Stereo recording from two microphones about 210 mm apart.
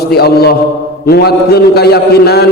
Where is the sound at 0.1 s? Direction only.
50° left (ahead or behind).